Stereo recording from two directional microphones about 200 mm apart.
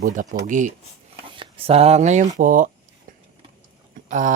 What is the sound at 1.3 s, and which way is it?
Speech, 25° right (ahead or behind).